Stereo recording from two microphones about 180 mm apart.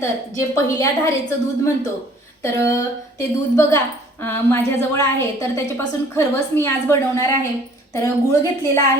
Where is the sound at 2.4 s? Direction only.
15° left (ahead or behind).